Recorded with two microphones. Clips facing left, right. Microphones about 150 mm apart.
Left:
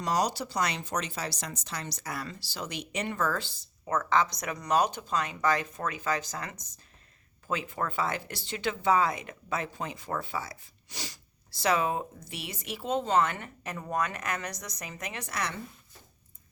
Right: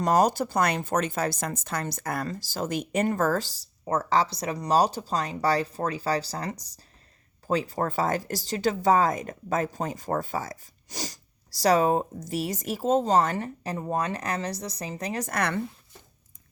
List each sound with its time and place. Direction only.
0.0 s speech: 50° right (ahead or behind)